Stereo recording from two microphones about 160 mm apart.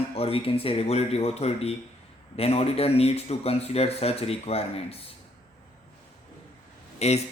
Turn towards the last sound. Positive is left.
turn(degrees=40)  # may be behind; listen again after turning